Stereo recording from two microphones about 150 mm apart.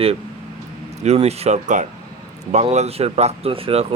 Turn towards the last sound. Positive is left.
turn(degrees=-40)  # may be behind; listen again after turning